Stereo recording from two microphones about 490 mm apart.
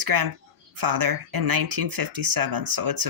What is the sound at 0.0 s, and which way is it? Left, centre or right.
Speech, right.